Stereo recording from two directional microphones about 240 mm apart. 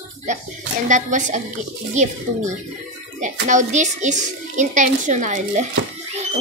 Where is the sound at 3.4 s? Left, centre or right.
Right.